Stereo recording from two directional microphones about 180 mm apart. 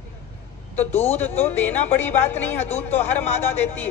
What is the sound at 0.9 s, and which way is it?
Speech, 35° left (ahead or behind).